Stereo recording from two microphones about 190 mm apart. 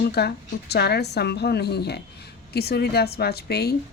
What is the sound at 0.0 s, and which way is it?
A woman's voice, 55° left (ahead or behind).